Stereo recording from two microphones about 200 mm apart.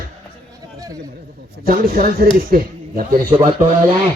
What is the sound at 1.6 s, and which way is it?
A man's voice, 45° right (ahead or behind).